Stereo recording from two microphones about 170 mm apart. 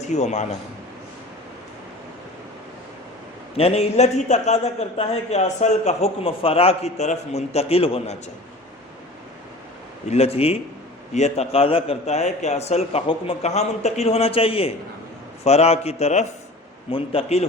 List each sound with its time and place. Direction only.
0.0 s a man's voice: 45° left (ahead or behind)
3.6 s a man's voice: 35° left (ahead or behind)
10.1 s a man's voice: 35° left (ahead or behind)